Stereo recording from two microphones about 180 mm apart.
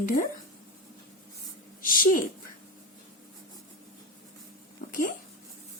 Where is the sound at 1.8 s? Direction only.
50° left (ahead or behind).